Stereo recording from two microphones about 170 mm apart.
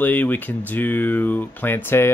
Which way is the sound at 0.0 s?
10° left (ahead or behind).